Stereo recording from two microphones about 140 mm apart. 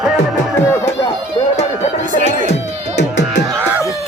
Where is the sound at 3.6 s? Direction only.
15° right (ahead or behind).